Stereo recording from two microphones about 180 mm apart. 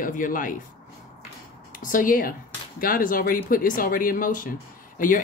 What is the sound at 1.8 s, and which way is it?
Speech, 50° left (ahead or behind).